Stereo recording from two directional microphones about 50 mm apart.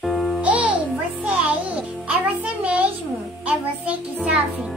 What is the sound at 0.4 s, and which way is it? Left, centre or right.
Music, right.